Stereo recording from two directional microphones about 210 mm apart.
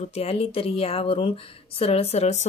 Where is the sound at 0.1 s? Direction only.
30° left (ahead or behind).